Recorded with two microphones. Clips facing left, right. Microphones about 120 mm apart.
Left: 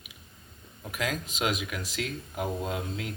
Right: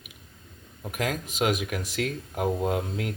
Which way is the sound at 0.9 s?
50° right (ahead or behind).